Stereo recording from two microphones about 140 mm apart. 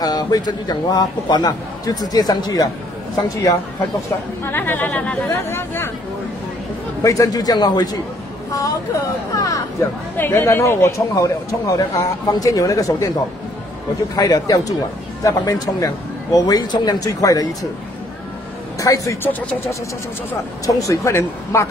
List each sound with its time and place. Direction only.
0.0 s speech: 30° left (ahead or behind)
7.0 s speech: 25° left (ahead or behind)
14.1 s speech: 25° left (ahead or behind)
18.8 s speech: 20° left (ahead or behind)